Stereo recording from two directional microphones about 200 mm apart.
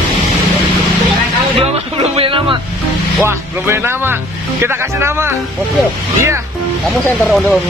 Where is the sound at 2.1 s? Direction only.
25° right (ahead or behind).